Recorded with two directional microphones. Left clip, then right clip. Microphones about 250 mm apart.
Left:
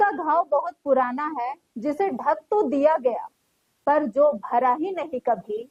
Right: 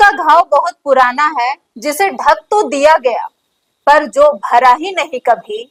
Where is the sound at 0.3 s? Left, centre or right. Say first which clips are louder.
Right 12 dB; right.